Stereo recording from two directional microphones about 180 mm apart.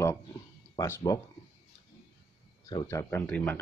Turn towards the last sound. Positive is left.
turn(degrees=10)  # may be behind; listen again after turning